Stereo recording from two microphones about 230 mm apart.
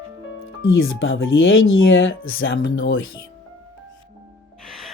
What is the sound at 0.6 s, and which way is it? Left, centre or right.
Speech, left.